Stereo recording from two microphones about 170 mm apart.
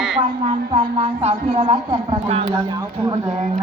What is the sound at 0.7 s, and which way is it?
Speech, 30° right (ahead or behind).